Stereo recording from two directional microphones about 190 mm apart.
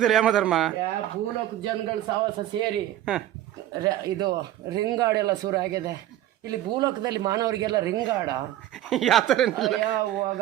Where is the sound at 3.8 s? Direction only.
20° right (ahead or behind).